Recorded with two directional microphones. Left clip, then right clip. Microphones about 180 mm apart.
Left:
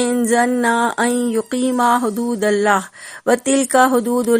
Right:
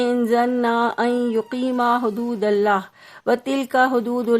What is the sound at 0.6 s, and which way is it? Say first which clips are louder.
A woman's voice: left 3 dB; 15° left (ahead or behind).